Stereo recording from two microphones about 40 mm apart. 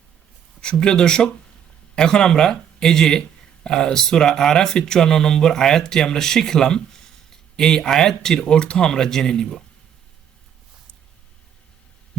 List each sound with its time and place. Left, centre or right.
0.6 s speech: left